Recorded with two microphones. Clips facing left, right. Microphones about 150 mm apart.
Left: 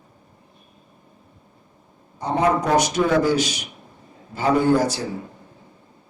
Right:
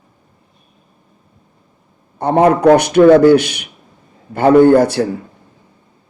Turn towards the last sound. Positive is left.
turn(degrees=-60)  # may be behind; listen again after turning